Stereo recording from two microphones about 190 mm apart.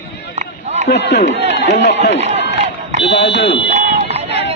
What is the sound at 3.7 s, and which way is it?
Run, 35° right (ahead or behind).